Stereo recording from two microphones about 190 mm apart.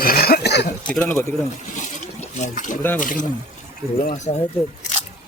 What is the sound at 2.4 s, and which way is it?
Speech, 40° left (ahead or behind).